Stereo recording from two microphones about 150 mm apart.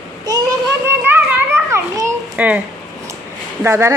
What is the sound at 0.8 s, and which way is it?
Children playing, 15° right (ahead or behind).